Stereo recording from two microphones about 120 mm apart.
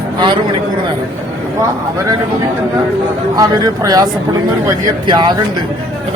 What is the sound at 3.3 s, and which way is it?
Speech, 35° right (ahead or behind).